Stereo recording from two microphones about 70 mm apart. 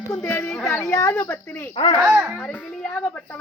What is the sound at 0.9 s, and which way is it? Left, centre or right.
Speech, left.